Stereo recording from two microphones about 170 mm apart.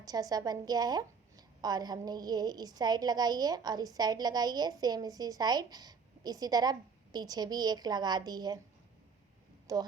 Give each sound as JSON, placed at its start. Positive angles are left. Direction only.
{"t": 0.0, "sound": "a woman's voice", "side_deg": -20}
{"t": 9.7, "sound": "a woman's voice", "side_deg": -20}